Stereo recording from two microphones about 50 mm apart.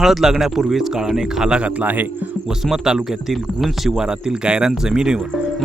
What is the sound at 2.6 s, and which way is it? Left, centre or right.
Speech, centre.